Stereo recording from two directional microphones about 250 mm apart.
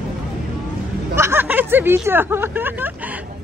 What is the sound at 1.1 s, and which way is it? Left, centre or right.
Speech, centre.